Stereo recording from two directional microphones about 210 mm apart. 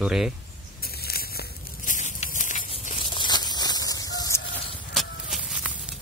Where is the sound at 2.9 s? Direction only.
20° left (ahead or behind).